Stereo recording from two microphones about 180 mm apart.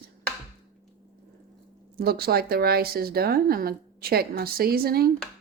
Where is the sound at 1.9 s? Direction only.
60° right (ahead or behind).